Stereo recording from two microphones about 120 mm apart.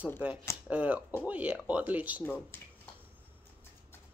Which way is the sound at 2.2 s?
15° left (ahead or behind).